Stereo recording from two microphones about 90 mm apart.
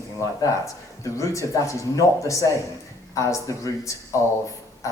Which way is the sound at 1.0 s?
35° left (ahead or behind).